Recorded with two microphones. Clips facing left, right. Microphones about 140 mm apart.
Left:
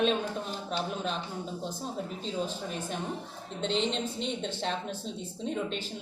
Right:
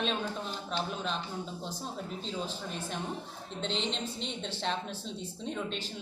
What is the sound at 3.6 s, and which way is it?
Speech, 45° left (ahead or behind).